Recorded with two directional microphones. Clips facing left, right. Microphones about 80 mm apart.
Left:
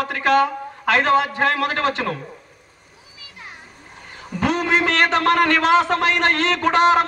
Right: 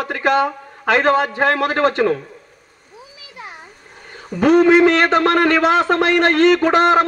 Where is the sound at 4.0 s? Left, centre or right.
Centre.